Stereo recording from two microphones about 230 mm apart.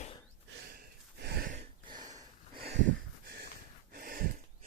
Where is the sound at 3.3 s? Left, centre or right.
Right.